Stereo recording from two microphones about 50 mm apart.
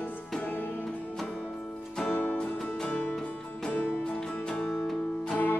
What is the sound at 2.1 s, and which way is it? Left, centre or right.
Music, left.